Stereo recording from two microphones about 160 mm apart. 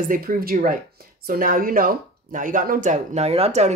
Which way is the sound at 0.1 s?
60° right (ahead or behind).